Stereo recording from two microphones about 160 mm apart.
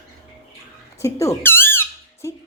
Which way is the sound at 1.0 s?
20° left (ahead or behind).